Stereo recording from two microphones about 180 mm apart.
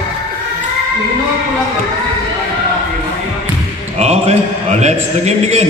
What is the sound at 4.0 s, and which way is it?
A man's voice, 35° right (ahead or behind).